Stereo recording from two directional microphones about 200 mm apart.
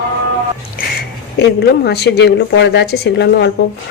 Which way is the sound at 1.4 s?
55° left (ahead or behind).